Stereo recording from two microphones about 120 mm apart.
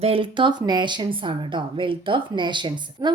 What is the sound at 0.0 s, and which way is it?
A woman's voice, 50° right (ahead or behind).